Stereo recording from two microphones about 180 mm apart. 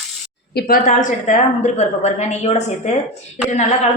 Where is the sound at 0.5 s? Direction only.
55° left (ahead or behind); by 2.9 s 40° left (ahead or behind).